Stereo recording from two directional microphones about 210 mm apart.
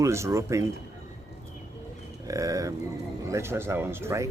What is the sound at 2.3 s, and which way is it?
Speech, 15° right (ahead or behind).